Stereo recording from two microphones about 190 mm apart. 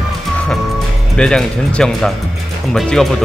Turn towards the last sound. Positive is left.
turn(degrees=0)  # may be behind; listen again after turning